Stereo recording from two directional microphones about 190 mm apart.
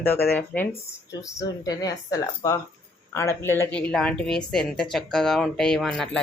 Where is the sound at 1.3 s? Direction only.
20° left (ahead or behind).